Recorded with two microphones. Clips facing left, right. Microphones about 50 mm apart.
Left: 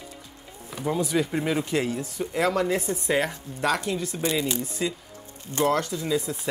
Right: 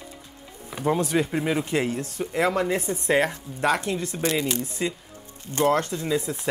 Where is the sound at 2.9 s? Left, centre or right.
Right.